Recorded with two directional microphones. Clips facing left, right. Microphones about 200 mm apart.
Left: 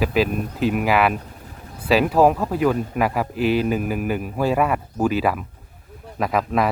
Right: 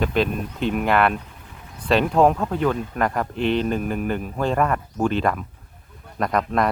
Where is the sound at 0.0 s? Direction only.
5° left (ahead or behind).